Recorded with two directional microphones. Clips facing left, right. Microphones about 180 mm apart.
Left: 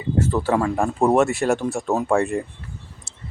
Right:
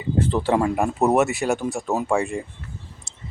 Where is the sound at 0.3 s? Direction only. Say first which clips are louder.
Right 1 dB; 20° right (ahead or behind).